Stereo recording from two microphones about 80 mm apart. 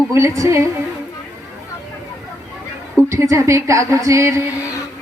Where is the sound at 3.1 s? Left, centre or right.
Right.